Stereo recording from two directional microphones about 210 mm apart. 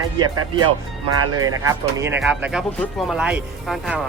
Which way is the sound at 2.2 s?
Centre (ahead or behind).